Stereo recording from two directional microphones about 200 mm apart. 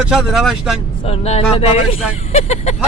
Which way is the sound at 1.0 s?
30° left (ahead or behind).